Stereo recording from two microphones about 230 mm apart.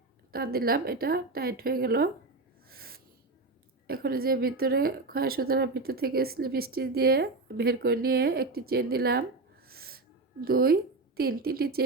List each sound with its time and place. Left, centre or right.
0.3 s a woman's voice: right
2.6 s a sound: right
3.8 s a woman's voice: right
9.6 s owl: right
10.4 s a woman's voice: right